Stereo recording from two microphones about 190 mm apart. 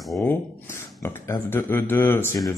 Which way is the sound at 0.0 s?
Centre (ahead or behind).